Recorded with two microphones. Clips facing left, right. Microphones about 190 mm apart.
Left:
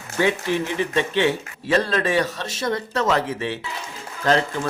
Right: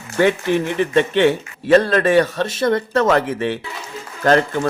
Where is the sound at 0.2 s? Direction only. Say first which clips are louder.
Right 5 dB; 55° right (ahead or behind).